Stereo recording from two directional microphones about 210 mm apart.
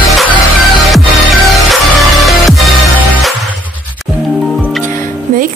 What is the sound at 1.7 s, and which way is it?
Music, centre (ahead or behind).